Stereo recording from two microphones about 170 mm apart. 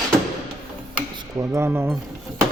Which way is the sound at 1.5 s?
15° right (ahead or behind).